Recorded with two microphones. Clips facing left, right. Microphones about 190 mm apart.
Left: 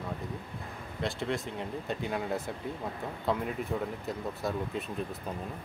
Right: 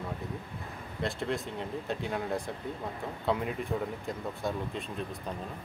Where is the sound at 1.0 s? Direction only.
Centre (ahead or behind).